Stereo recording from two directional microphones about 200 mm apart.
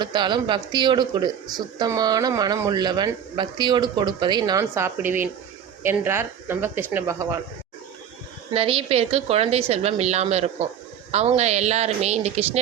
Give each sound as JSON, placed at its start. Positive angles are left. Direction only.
{"t": 0.0, "sound": "speech", "side_deg": -25}
{"t": 8.5, "sound": "a woman's voice", "side_deg": -30}